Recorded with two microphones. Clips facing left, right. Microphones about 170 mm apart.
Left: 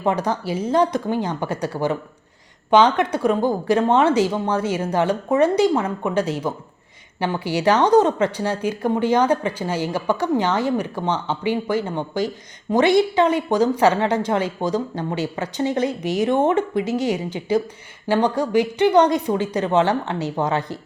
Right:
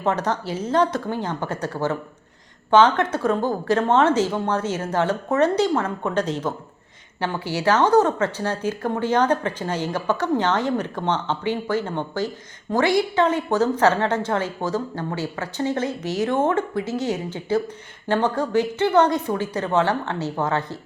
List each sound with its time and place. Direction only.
0.0 s speech: 10° left (ahead or behind)